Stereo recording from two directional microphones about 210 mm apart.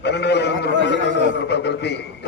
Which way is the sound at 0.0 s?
55° left (ahead or behind).